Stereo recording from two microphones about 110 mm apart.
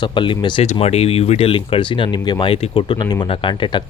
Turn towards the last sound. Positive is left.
turn(degrees=45)  # may be behind; listen again after turning